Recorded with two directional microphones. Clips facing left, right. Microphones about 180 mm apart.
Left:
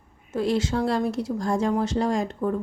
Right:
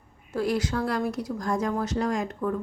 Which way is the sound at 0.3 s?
25° left (ahead or behind).